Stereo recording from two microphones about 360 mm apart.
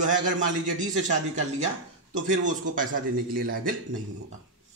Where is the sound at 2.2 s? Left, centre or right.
Right.